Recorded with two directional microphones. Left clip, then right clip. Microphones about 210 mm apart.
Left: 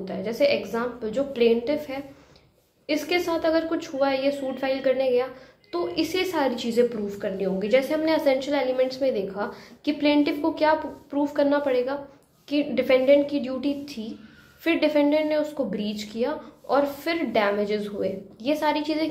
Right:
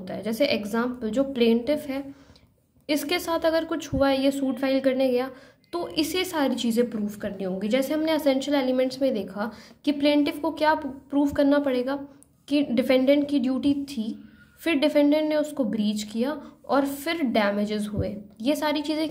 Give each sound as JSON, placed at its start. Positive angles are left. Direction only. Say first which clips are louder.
{"t": 0.0, "sound": "a woman's voice", "louder": "left 3 dB", "side_deg": -40}